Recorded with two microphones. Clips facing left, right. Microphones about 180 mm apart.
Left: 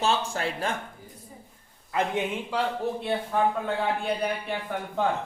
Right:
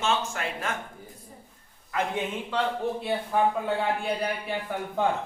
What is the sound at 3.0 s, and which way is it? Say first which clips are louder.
Speech: even; 10° right (ahead or behind).